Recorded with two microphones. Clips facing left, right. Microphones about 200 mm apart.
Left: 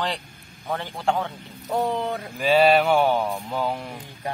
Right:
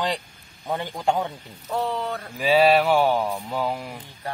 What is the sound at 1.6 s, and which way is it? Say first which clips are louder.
Speech: left 2 dB; 15° left (ahead or behind).